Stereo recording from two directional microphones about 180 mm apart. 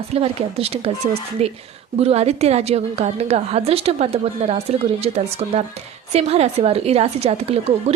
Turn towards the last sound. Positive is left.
turn(degrees=-35)  # may be behind; listen again after turning